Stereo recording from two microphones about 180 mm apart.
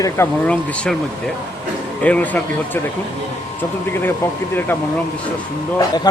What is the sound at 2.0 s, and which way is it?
Speech, 10° left (ahead or behind).